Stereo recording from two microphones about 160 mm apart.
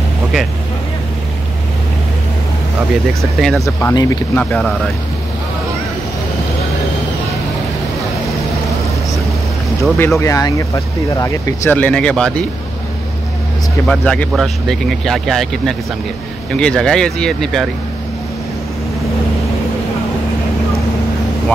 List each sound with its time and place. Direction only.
3.3 s speech: centre (ahead or behind)
3.6 s speech: 20° left (ahead or behind)
4.4 s speech: 5° left (ahead or behind)
9.9 s speech: 15° left (ahead or behind)
13.8 s speech: 5° left (ahead or behind)